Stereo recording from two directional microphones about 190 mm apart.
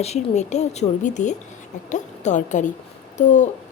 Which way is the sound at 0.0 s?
35° left (ahead or behind).